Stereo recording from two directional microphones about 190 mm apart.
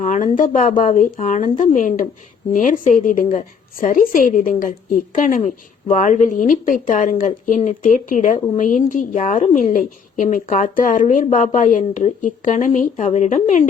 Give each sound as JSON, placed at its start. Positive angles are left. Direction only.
{"t": 0.0, "sound": "a woman's voice", "side_deg": 40}